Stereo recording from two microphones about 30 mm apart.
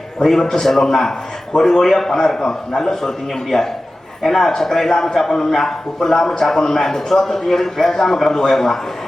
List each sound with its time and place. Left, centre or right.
0.2 s a man's voice: centre